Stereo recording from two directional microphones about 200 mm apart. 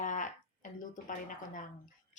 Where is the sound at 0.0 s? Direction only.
40° left (ahead or behind).